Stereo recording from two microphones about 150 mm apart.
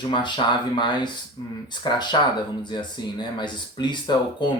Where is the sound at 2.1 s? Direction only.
30° left (ahead or behind).